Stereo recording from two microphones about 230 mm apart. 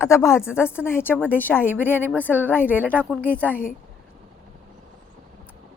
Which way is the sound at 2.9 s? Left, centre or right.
Centre.